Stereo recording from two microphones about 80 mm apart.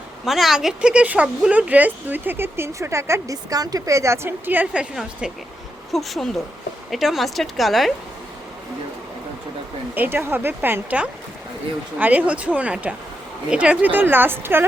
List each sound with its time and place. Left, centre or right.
0.3 s speech: centre
0.8 s speech: centre; by 3.3 s right
3.5 s a woman's voice: right; by 4.9 s centre
5.9 s speech: centre
9.9 s speech: right